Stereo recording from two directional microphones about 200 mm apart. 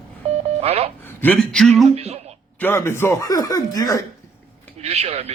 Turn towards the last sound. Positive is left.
turn(degrees=-30)  # may be behind; listen again after turning